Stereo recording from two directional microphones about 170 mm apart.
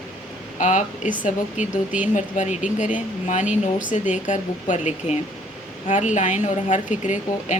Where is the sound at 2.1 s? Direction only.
45° left (ahead or behind).